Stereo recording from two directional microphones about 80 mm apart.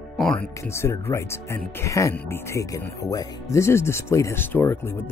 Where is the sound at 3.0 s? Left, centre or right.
Left.